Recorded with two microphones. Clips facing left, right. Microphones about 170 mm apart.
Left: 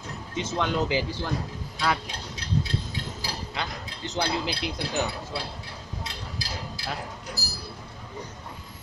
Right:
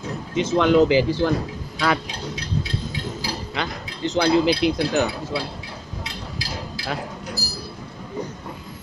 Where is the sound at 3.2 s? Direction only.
90° right.